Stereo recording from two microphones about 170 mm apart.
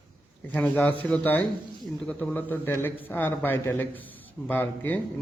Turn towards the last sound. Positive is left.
turn(degrees=10)  # may be behind; listen again after turning